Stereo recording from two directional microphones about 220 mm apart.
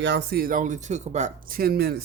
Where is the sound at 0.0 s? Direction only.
50° right (ahead or behind).